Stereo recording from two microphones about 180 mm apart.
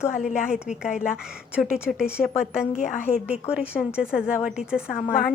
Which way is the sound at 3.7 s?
5° right (ahead or behind).